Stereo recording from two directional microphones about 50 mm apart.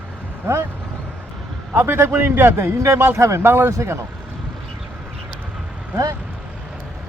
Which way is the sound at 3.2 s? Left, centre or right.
Right.